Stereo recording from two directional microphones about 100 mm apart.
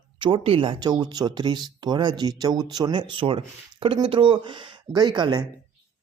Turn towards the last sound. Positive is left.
turn(degrees=-50)  # may be behind; listen again after turning